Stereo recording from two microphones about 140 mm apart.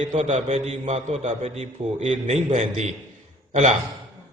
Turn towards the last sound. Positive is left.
turn(degrees=-55)  # may be behind; listen again after turning